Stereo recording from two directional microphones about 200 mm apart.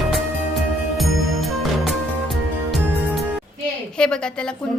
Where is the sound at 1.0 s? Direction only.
Centre (ahead or behind).